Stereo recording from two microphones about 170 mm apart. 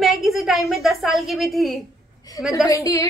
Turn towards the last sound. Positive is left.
turn(degrees=20)  # may be behind; listen again after turning